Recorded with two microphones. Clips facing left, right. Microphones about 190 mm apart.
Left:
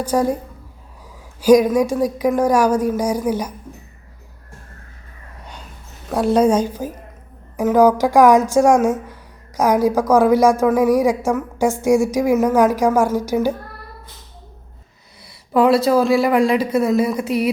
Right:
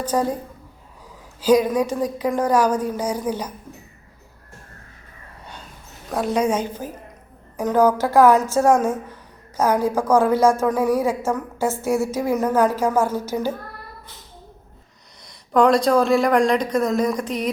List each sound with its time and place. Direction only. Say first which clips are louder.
0.0 s a woman's voice: left 4 dB; 10° left (ahead or behind)
1.4 s a woman's voice: left 4 dB; 10° left (ahead or behind)
6.2 s a woman's voice: left 6 dB; 35° left (ahead or behind)
6.6 s a woman's voice: left 5 dB; 10° left (ahead or behind)
15.2 s speech: left 1 dB; 5° left (ahead or behind)